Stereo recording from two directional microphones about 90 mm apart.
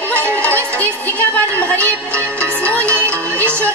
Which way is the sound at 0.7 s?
20° left (ahead or behind).